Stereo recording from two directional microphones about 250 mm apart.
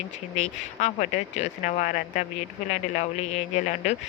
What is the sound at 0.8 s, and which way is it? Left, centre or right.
Speech, left.